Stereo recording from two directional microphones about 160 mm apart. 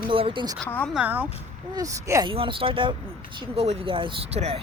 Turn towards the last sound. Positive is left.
turn(degrees=-40)  # may be behind; listen again after turning